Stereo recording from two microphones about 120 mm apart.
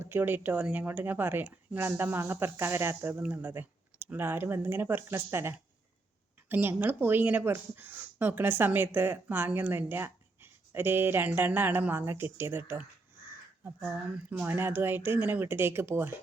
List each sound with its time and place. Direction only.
0.0 s speech: 15° right (ahead or behind)
13.8 s speech: 10° right (ahead or behind)